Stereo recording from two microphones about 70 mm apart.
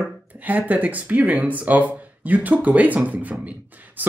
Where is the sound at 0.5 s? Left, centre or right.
Right.